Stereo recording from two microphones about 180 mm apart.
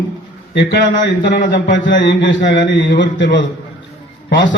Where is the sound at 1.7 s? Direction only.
75° left (ahead or behind).